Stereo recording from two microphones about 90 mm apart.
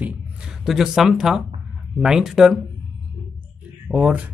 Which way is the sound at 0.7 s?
5° right (ahead or behind).